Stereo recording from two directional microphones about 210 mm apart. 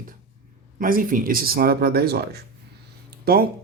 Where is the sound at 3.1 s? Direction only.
45° right (ahead or behind).